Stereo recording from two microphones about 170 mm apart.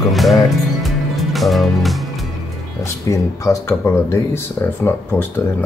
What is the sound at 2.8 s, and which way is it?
Speech, 15° left (ahead or behind).